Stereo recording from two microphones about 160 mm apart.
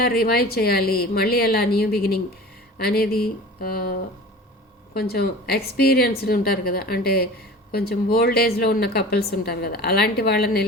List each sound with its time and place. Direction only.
0.0 s speech: 70° left (ahead or behind)
4.9 s speech: 75° left (ahead or behind)